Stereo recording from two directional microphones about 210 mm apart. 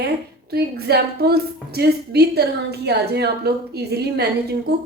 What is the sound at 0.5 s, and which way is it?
A woman's voice, 50° right (ahead or behind).